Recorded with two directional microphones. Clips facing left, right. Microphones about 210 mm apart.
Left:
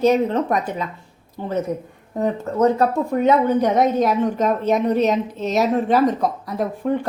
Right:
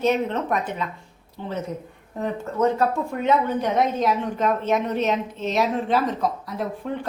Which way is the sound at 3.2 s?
40° left (ahead or behind).